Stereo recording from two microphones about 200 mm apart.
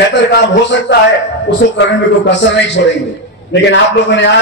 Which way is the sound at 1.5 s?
65° left (ahead or behind).